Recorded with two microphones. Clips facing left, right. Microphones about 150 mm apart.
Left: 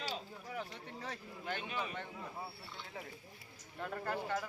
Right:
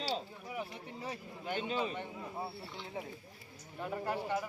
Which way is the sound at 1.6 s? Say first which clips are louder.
Right 5 dB; 25° right (ahead or behind).